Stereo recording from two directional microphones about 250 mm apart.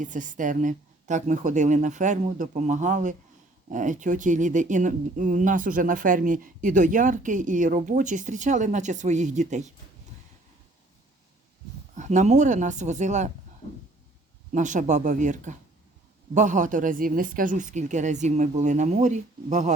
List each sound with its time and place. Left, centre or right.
0.0 s speech: right
11.9 s speech: right
14.5 s speech: right